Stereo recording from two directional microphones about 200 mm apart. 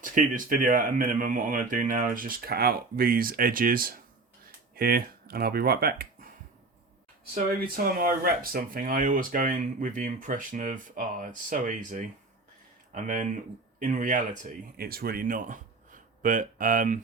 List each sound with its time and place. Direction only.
0.0 s speech: 45° right (ahead or behind)
7.5 s speech: 45° right (ahead or behind)